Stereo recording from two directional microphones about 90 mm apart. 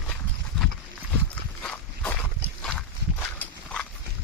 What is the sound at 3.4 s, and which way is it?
Horse, 10° left (ahead or behind).